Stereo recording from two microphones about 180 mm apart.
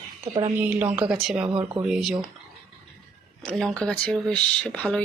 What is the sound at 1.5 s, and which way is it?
Speech, 25° right (ahead or behind).